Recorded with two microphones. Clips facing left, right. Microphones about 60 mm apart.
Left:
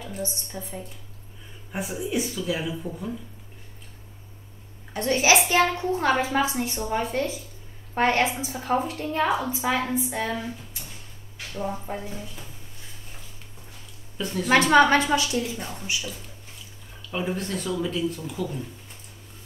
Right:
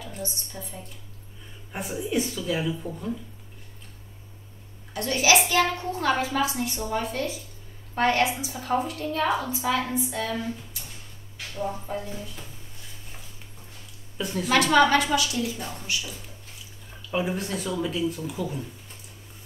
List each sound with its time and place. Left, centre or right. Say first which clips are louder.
0.0 s a woman's voice: left 3 dB; left
1.7 s speech: even; centre
4.9 s a woman's voice: left 1 dB; left
11.5 s speech: even; centre
14.1 s speech: left 1 dB; centre
14.5 s a woman's voice: left 2 dB; left
17.1 s speech: right 1 dB; centre